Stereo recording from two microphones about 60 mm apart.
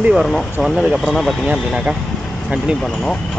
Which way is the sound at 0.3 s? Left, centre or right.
Centre.